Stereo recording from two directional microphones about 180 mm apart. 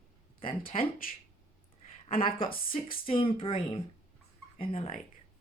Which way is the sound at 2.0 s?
30° left (ahead or behind).